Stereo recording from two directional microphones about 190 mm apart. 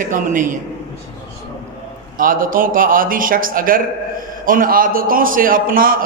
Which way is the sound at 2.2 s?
45° right (ahead or behind).